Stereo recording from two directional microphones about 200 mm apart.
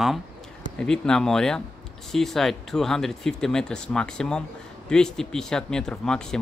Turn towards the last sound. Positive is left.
turn(degrees=5)  # may be behind; listen again after turning